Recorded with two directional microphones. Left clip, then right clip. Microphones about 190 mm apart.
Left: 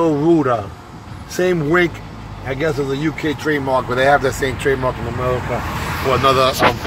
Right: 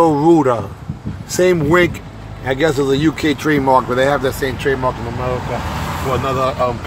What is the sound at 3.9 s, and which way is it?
Speech, 15° right (ahead or behind).